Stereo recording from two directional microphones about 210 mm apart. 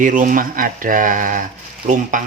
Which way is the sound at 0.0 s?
40° right (ahead or behind).